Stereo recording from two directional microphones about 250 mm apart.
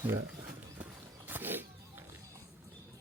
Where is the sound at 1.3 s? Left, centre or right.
Centre.